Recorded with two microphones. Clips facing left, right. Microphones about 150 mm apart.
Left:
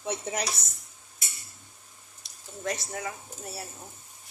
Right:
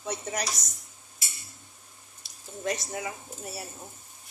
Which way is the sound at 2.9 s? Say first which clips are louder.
Right 1 dB; 10° right (ahead or behind).